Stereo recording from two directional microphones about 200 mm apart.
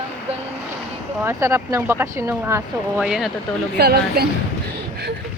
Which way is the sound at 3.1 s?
Centre (ahead or behind).